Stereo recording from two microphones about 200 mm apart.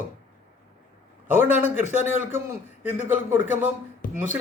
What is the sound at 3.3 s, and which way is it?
Speech, 10° right (ahead or behind).